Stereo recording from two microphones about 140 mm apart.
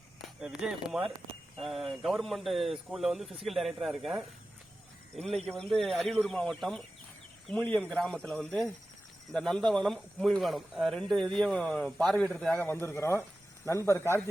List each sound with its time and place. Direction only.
0.6 s speech: 5° right (ahead or behind)
5.5 s speech: 5° left (ahead or behind); by 14.2 s 20° left (ahead or behind)